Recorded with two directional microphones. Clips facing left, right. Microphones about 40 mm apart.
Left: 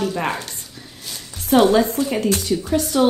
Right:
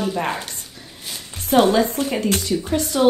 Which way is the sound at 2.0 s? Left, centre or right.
Right.